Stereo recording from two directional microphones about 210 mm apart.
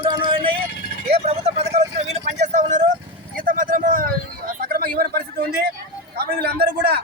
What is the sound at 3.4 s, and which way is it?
Vehicle, 40° right (ahead or behind).